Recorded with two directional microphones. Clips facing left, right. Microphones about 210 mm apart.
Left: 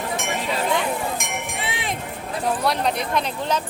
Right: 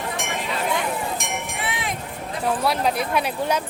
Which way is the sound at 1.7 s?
30° left (ahead or behind).